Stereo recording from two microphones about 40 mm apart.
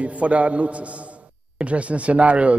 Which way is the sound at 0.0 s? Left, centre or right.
Right.